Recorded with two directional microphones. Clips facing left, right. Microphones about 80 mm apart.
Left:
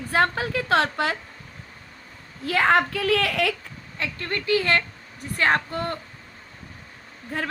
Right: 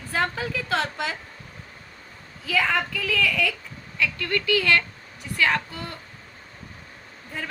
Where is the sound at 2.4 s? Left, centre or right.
Left.